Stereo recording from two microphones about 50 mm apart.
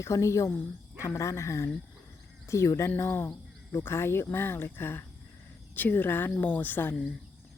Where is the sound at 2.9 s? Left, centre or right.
Left.